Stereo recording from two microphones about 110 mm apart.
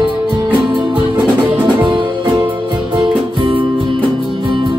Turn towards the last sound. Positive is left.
turn(degrees=-50)  # may be behind; listen again after turning